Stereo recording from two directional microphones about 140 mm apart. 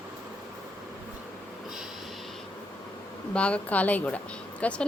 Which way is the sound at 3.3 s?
10° left (ahead or behind).